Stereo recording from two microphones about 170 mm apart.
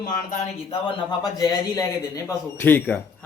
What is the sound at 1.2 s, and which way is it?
Speech, 20° left (ahead or behind).